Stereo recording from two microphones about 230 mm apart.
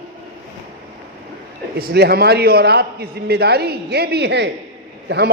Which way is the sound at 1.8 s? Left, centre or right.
Right.